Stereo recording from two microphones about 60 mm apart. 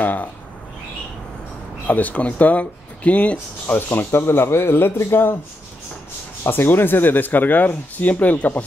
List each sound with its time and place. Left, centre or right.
0.0 s speech: left
1.9 s speech: left
3.6 s speech: left
6.4 s speech: left